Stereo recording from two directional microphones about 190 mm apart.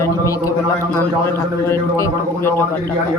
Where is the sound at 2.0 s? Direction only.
10° left (ahead or behind).